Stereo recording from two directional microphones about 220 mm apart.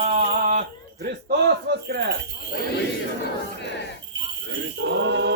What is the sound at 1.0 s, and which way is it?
Speech, 45° right (ahead or behind).